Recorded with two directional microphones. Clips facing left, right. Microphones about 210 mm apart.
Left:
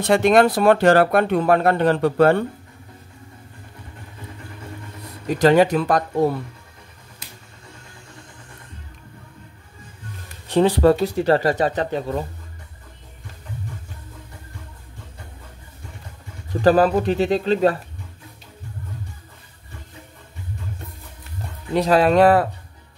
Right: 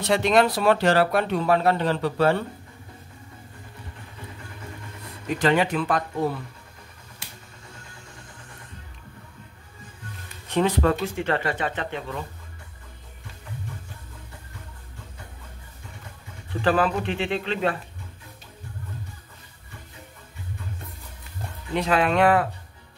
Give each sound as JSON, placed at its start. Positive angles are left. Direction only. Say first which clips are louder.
{"t": 0.0, "sound": "speech", "louder": "left 5 dB", "side_deg": 50}
{"t": 5.4, "sound": "speech", "louder": "left 7 dB", "side_deg": 40}
{"t": 10.5, "sound": "speech", "louder": "left 6 dB", "side_deg": 35}
{"t": 16.6, "sound": "speech", "louder": "left 7 dB", "side_deg": 40}
{"t": 21.7, "sound": "speech", "louder": "left 6 dB", "side_deg": 35}